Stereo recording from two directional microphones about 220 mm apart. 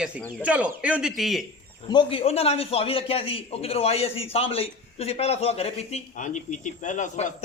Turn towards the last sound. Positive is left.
turn(degrees=35)  # may be behind; listen again after turning